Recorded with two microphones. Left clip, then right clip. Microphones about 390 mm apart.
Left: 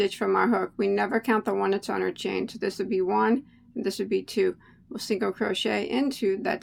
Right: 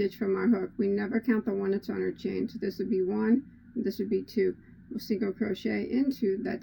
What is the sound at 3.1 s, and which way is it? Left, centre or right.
Speech, left.